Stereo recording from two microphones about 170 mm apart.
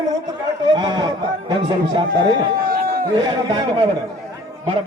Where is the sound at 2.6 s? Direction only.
60° right (ahead or behind).